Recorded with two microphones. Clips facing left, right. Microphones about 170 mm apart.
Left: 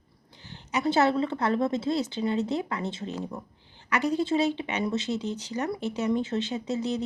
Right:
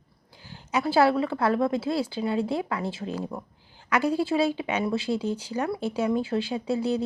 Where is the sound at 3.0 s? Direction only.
20° left (ahead or behind).